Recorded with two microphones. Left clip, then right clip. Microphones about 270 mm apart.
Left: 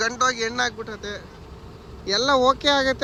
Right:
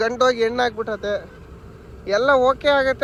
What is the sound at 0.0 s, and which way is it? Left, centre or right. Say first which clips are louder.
Speech: right 4 dB; centre.